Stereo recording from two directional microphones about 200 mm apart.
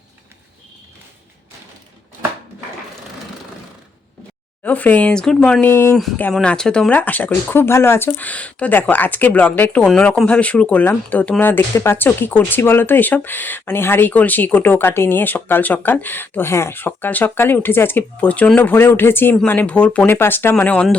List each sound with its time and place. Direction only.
4.6 s speech: 10° left (ahead or behind)